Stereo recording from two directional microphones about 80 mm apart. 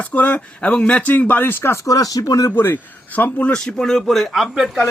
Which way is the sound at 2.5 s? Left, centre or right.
Left.